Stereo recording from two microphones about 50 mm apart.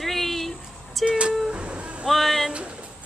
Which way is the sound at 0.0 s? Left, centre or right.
Centre.